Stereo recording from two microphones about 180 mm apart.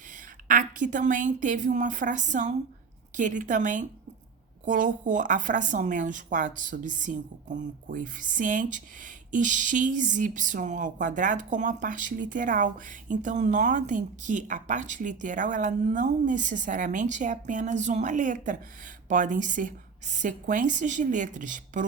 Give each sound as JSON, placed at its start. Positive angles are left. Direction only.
{"t": 0.4, "sound": "speech", "side_deg": -45}